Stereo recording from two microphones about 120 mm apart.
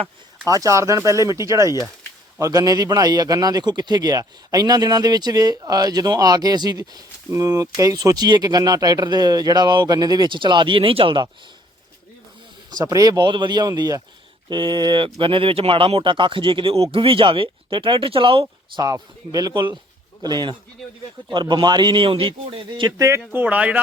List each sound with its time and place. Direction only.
0.4 s speech: 30° right (ahead or behind); by 11.3 s 45° right (ahead or behind)
12.7 s speech: 30° right (ahead or behind); by 18.4 s 50° right (ahead or behind)
18.8 s speech: 30° right (ahead or behind)
23.0 s speech: 25° right (ahead or behind)
23.3 s speech: 15° right (ahead or behind)